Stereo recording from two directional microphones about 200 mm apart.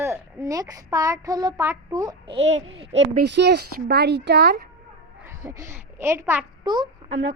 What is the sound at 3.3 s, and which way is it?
Speech, 55° right (ahead or behind).